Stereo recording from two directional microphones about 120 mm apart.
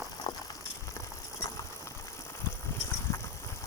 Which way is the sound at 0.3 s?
40° left (ahead or behind).